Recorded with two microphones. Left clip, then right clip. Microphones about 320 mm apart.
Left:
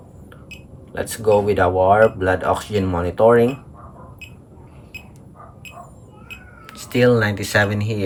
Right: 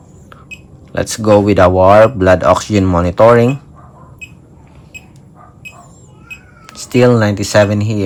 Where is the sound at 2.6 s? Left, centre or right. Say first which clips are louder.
Right 8 dB; centre.